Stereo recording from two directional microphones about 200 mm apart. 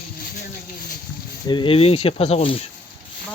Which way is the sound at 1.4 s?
25° left (ahead or behind).